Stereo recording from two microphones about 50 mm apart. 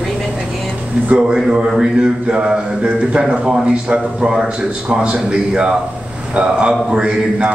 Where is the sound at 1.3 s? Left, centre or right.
Centre.